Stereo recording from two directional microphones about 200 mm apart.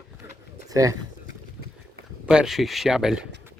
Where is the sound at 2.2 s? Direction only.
5° right (ahead or behind).